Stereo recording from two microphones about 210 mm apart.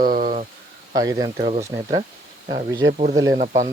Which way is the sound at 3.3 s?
35° right (ahead or behind).